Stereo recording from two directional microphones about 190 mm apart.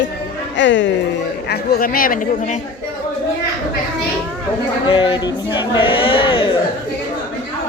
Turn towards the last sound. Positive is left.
turn(degrees=25)  # may be behind; listen again after turning